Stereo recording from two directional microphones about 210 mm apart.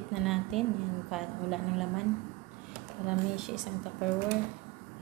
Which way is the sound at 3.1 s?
5° right (ahead or behind).